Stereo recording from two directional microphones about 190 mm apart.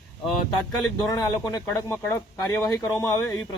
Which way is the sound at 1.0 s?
20° left (ahead or behind).